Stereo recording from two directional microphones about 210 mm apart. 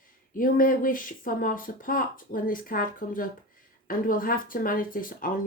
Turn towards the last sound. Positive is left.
turn(degrees=40)  # may be behind; listen again after turning